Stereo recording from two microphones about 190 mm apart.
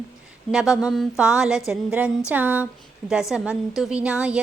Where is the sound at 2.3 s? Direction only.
10° right (ahead or behind).